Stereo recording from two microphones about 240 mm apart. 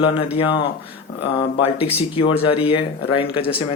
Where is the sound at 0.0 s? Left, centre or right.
Left.